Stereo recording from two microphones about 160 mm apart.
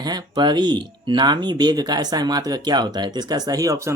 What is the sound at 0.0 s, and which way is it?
Speech, 25° right (ahead or behind).